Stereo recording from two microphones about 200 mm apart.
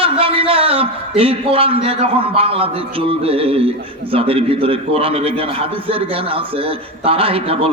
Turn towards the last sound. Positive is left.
turn(degrees=-30)  # may be behind; listen again after turning